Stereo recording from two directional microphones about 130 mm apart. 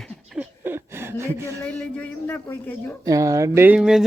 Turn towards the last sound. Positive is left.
turn(degrees=-5)  # may be behind; listen again after turning